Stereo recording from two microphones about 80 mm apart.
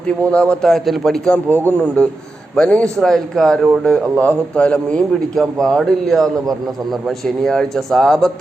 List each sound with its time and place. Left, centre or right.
0.3 s a man's voice: centre
0.7 s a man's voice: centre
4.2 s a man's voice: centre
7.4 s a man's voice: centre